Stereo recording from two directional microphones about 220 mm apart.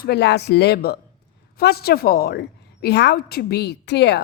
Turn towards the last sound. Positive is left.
turn(degrees=50)  # may be behind; listen again after turning